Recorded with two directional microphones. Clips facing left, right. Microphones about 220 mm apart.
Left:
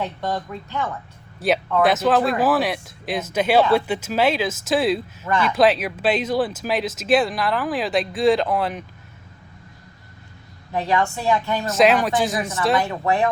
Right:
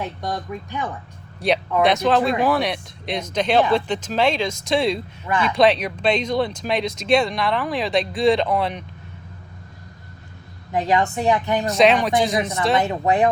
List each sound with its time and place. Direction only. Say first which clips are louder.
0.0 s speech: left 2 dB; 15° right (ahead or behind)
1.4 s speech: even; centre (ahead or behind)
10.7 s a woman's voice: right 2 dB; 20° right (ahead or behind)
11.7 s speech: even; centre (ahead or behind)
12.7 s a woman's voice: right 3 dB; 20° right (ahead or behind)